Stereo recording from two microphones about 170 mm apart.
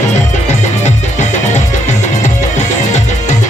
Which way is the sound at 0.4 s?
45° left (ahead or behind).